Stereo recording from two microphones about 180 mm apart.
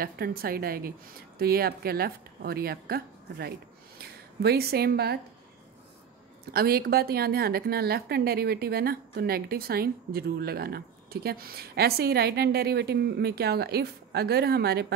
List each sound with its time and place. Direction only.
0.0 s a woman's voice: 55° right (ahead or behind)
6.5 s a woman's voice: 60° right (ahead or behind)